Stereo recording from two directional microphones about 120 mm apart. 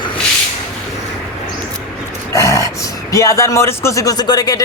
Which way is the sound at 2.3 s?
25° left (ahead or behind).